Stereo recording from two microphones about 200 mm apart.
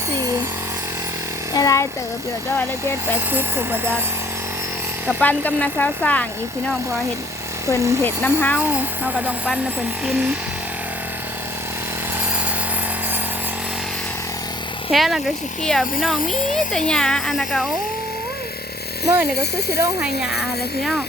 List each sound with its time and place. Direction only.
1.5 s speech: 15° left (ahead or behind)
3.3 s speech: 10° right (ahead or behind)
5.0 s speech: 10° left (ahead or behind)
7.8 s speech: 15° right (ahead or behind)
8.0 s speech: 10° left (ahead or behind)
8.5 s speech: 10° right (ahead or behind)
14.8 s speech: centre (ahead or behind)
19.0 s speech: 10° right (ahead or behind)